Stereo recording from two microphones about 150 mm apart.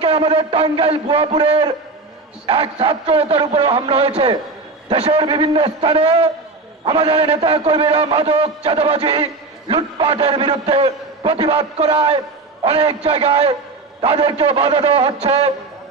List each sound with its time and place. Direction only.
0.0 s a man's voice: 40° right (ahead or behind)